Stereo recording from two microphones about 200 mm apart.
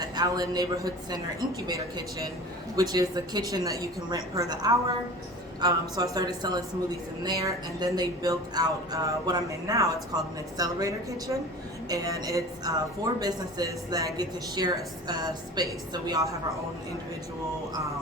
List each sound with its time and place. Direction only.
0.0 s a man's voice: 20° right (ahead or behind)